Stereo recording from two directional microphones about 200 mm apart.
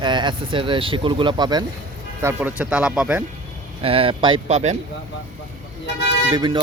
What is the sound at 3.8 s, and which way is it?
Speech, 30° right (ahead or behind).